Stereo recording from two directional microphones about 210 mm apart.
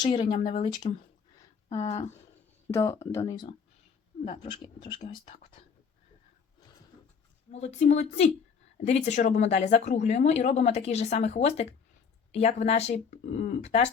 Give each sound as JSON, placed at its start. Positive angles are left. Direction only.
{"t": 0.0, "sound": "speech", "side_deg": 30}
{"t": 2.6, "sound": "speech", "side_deg": 15}
{"t": 7.5, "sound": "speech", "side_deg": 30}